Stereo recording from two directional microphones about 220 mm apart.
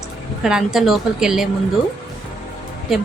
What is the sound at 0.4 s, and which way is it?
A woman's voice, centre (ahead or behind).